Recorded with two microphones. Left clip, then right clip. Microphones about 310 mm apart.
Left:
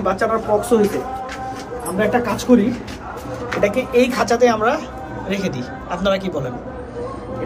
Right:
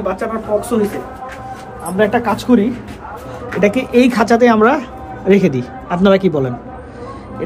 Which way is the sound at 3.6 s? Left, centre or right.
Right.